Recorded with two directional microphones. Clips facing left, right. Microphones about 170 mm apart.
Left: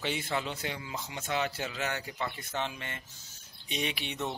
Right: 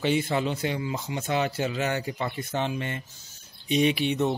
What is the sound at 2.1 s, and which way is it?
Speech, 35° right (ahead or behind).